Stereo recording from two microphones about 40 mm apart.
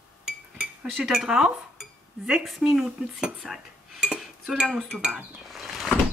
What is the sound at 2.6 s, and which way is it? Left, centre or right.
Speech, right.